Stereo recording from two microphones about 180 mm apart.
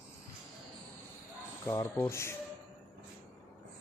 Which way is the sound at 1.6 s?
15° left (ahead or behind).